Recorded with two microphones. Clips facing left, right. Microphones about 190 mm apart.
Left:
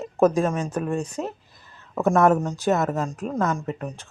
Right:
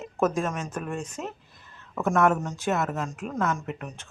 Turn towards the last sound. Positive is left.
turn(degrees=35)  # may be behind; listen again after turning